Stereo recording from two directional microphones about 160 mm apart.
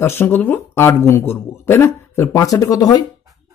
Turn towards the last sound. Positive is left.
turn(degrees=20)  # may be behind; listen again after turning